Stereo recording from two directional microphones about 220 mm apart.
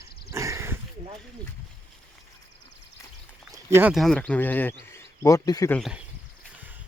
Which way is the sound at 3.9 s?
Centre (ahead or behind).